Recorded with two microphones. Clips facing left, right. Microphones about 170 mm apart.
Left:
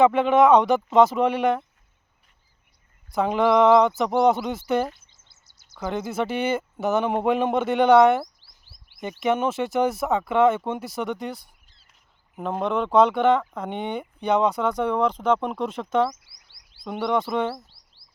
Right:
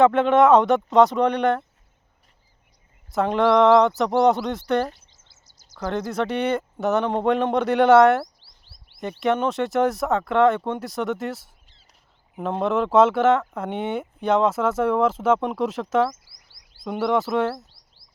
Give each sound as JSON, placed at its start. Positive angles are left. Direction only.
{"t": 0.0, "sound": "speech", "side_deg": 0}
{"t": 3.1, "sound": "speech", "side_deg": 0}
{"t": 5.1, "sound": "a sound", "side_deg": 55}
{"t": 5.7, "sound": "speech", "side_deg": 0}